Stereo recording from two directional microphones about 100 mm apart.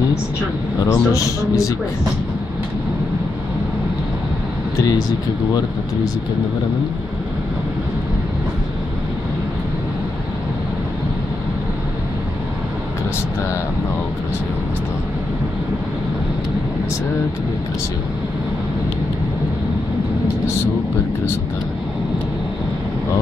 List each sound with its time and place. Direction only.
0.9 s speech: 30° left (ahead or behind)